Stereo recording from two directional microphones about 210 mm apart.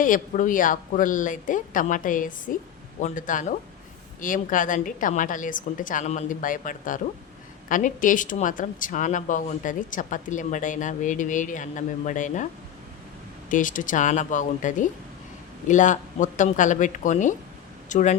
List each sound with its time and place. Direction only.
0.0 s speech: 40° left (ahead or behind)
13.5 s speech: 40° left (ahead or behind)